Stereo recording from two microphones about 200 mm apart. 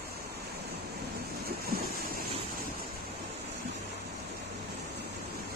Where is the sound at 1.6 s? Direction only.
50° right (ahead or behind).